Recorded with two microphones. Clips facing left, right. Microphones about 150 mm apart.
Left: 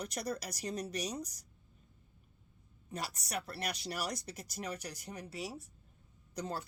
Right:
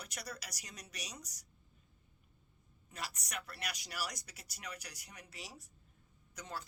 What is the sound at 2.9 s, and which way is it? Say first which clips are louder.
Speech: left 5 dB; 35° left (ahead or behind).